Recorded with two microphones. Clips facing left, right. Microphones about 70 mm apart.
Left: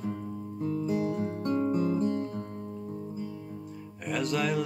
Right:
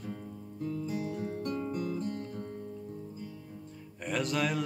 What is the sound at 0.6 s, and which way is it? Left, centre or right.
Music, left.